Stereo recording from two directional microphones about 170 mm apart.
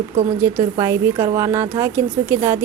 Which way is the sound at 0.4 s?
15° right (ahead or behind).